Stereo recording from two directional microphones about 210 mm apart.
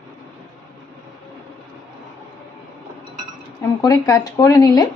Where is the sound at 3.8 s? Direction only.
15° left (ahead or behind).